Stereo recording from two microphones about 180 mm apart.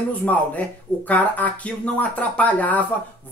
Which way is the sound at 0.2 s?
10° left (ahead or behind).